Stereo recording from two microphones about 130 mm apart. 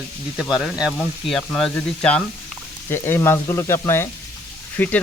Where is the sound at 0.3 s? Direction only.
Centre (ahead or behind).